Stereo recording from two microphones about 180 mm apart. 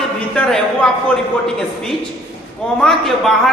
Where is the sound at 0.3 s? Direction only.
5° left (ahead or behind).